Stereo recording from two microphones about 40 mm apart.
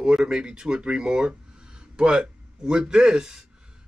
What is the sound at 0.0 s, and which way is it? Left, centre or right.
A man's voice, right.